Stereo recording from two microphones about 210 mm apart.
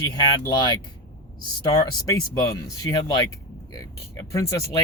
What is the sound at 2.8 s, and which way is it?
Speech, 20° left (ahead or behind).